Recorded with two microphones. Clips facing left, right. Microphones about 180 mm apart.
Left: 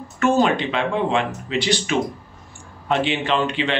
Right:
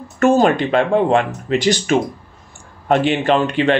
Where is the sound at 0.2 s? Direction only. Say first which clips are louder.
Right 5 dB; 45° right (ahead or behind).